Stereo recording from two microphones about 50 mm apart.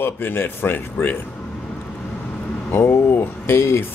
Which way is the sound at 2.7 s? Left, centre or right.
Left.